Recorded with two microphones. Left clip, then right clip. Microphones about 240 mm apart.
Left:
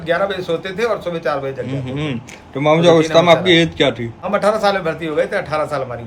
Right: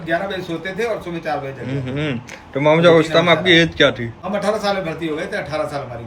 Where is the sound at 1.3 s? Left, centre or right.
Centre.